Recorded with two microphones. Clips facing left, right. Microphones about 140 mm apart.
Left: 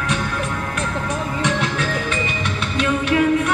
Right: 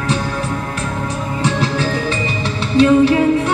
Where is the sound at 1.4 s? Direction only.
30° right (ahead or behind).